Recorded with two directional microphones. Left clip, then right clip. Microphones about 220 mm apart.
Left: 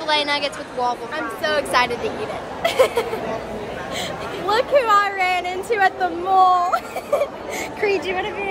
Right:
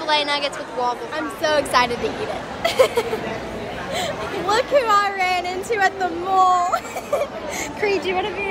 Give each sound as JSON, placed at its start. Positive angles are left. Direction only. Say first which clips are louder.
{"t": 0.0, "sound": "a woman's voice", "louder": "even", "side_deg": -5}
{"t": 1.1, "sound": "speech", "louder": "right 1 dB", "side_deg": 5}
{"t": 4.5, "sound": "speech", "louder": "left 1 dB", "side_deg": 15}
{"t": 7.8, "sound": "speech", "louder": "even", "side_deg": 10}